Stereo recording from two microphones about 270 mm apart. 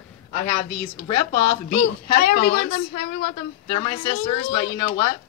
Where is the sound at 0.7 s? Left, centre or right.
Left.